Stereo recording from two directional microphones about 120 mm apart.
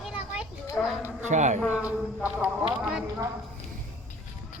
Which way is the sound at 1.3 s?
85° right.